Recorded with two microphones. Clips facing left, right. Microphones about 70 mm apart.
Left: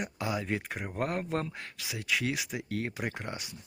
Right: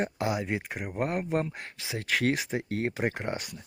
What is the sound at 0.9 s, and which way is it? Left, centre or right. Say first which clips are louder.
Speech: right 3 dB; right.